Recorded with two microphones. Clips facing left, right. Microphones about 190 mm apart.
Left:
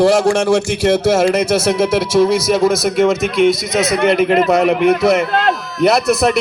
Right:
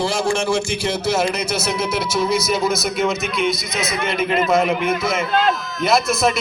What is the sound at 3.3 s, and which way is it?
A man's voice, 80° left.